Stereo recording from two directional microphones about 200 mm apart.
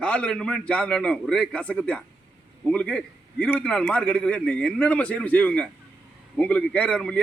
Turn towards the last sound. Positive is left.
turn(degrees=5)  # may be behind; listen again after turning